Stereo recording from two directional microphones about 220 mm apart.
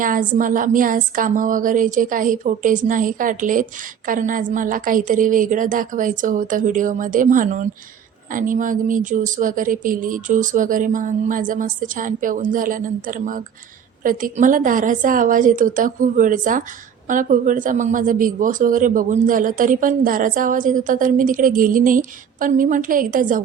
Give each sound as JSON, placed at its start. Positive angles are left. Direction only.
{"t": 0.0, "sound": "a woman's voice", "side_deg": -35}